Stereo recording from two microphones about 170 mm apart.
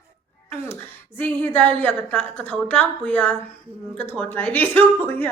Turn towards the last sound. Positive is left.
turn(degrees=10)  # may be behind; listen again after turning